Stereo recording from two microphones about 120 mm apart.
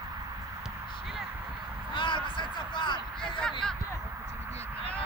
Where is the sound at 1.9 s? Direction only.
40° left (ahead or behind).